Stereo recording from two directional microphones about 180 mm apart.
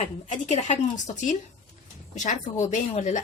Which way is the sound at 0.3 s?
40° left (ahead or behind).